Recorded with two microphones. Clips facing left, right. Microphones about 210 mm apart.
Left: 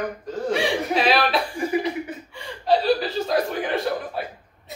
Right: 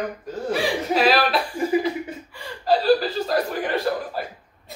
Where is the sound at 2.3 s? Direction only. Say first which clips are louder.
Even; centre (ahead or behind).